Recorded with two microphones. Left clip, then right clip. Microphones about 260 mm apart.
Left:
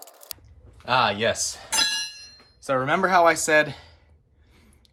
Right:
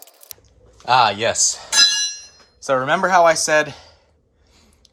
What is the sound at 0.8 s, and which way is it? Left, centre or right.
Speech, centre.